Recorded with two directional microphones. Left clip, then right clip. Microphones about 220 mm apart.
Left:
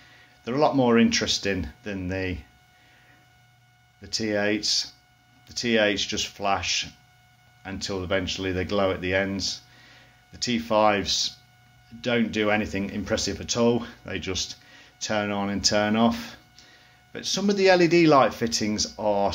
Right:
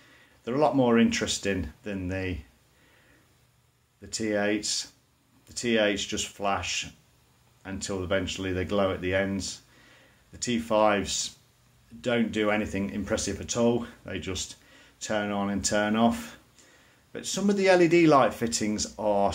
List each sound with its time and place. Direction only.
0.4 s speech: 5° left (ahead or behind)
4.0 s speech: 5° left (ahead or behind)